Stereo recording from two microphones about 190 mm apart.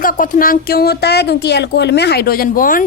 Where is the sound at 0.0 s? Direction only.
45° left (ahead or behind).